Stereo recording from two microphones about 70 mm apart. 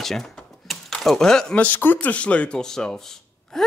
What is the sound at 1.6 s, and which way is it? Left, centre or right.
A man's voice, left.